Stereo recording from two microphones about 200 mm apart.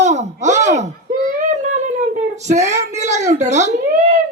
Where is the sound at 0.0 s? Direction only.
35° right (ahead or behind).